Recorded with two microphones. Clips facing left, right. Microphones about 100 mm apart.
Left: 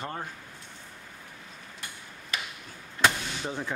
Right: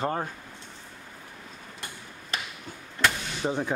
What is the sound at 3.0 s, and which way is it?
Vehicle, 20° left (ahead or behind).